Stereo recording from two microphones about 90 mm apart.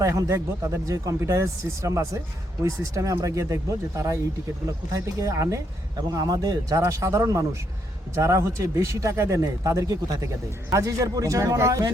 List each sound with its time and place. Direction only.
0.0 s speech: 35° right (ahead or behind)